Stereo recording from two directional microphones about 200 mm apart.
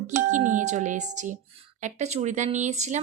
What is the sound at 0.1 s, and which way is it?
Speech, 40° right (ahead or behind).